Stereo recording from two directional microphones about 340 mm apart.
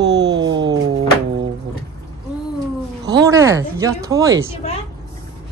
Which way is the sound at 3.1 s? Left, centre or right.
Centre.